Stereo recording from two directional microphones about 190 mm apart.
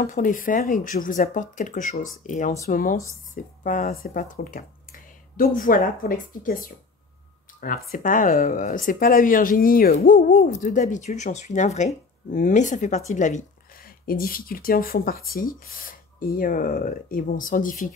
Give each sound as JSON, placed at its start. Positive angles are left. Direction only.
{"t": 0.0, "sound": "speech", "side_deg": 45}